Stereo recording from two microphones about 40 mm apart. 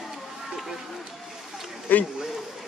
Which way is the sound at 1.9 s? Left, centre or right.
Left.